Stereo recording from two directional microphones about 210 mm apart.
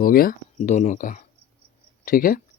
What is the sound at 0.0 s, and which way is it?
Speech, 45° left (ahead or behind).